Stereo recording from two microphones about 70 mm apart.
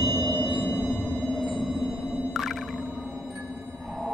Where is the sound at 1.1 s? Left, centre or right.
Centre.